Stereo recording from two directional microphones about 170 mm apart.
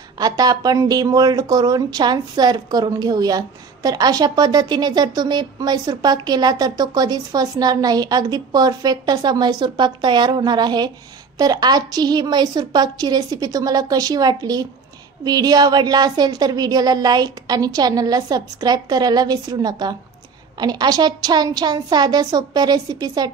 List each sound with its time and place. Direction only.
0.2 s speech: 25° right (ahead or behind)